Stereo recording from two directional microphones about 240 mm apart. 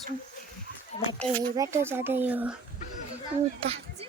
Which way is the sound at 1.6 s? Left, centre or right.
Centre.